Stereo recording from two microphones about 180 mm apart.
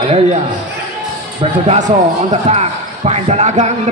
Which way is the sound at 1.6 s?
35° right (ahead or behind).